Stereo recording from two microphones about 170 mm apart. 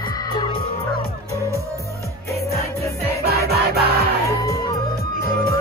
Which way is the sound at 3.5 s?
70° right (ahead or behind).